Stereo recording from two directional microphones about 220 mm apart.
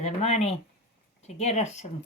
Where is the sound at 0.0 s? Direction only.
30° left (ahead or behind).